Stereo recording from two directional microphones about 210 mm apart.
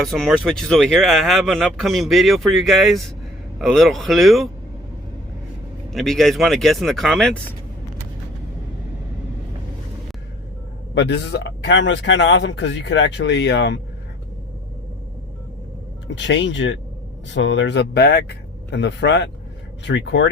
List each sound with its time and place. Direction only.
0.0 s speech: centre (ahead or behind)
5.9 s speech: centre (ahead or behind)
10.9 s speech: 55° left (ahead or behind)
16.0 s speech: 60° left (ahead or behind)